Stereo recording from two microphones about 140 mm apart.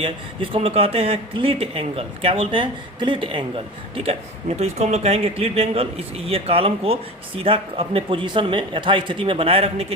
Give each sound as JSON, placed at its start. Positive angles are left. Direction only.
{"t": 0.5, "sound": "speech", "side_deg": -45}